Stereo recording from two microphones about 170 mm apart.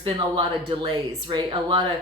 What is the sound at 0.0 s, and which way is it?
Speech, 30° right (ahead or behind).